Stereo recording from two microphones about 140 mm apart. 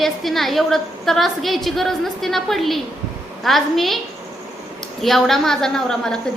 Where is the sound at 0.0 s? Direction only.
Centre (ahead or behind).